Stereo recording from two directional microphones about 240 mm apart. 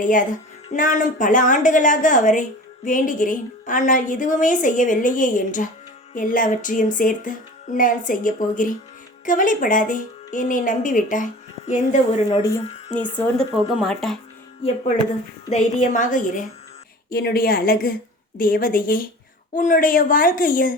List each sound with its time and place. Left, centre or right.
0.0 s a woman's voice: left
12.4 s speech: centre
15.4 s a woman's voice: left